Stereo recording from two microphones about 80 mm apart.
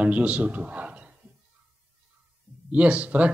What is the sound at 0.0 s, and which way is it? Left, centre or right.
A man's voice, centre.